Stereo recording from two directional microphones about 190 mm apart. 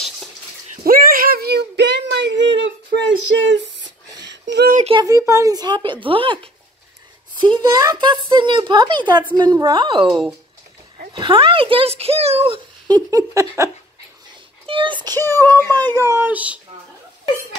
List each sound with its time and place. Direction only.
0.8 s a sound: 50° right (ahead or behind)
4.7 s a child's voice: 30° right (ahead or behind)
5.0 s speech: 15° right (ahead or behind)
7.5 s speech: 25° right (ahead or behind)
11.1 s speech: 25° right (ahead or behind)
12.9 s a sound: 15° right (ahead or behind)
14.7 s a child's voice: 25° right (ahead or behind)
15.2 s a child's voice: 10° left (ahead or behind)
16.0 s a sound: 15° right (ahead or behind)